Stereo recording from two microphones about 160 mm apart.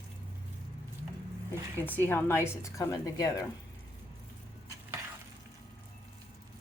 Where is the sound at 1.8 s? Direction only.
10° left (ahead or behind).